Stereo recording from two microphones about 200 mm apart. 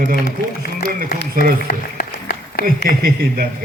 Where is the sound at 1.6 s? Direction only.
50° left (ahead or behind).